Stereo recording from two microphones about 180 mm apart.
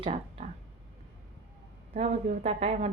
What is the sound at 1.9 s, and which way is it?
Speech, 40° right (ahead or behind).